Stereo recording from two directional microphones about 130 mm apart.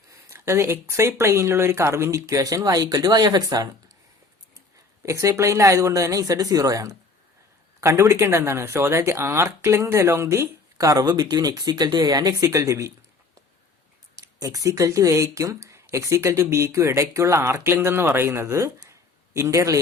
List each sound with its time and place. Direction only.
0.3 s speech: 20° right (ahead or behind)
5.0 s speech: 25° right (ahead or behind)
14.4 s speech: 25° right (ahead or behind)